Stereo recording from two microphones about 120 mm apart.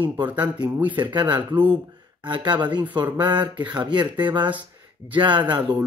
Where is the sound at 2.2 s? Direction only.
40° right (ahead or behind).